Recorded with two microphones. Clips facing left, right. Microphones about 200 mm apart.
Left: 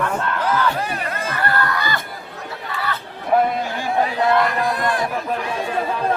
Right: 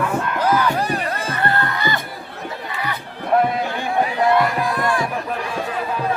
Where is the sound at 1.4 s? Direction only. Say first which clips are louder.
Even; 25° right (ahead or behind).